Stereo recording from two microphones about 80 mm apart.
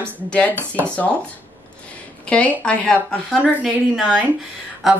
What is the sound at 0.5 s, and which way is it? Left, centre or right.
Speech, right.